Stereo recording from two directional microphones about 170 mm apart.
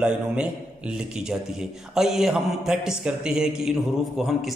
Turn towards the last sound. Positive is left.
turn(degrees=0)  # may be behind; listen again after turning